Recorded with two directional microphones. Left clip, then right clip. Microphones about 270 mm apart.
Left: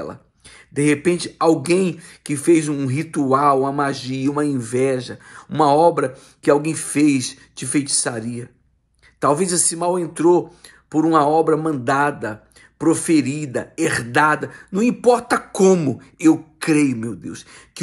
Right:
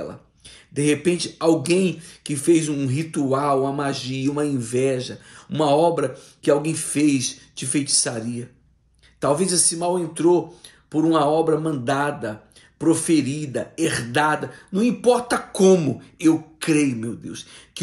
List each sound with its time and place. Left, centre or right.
0.7 s speech: centre
16.6 s speech: left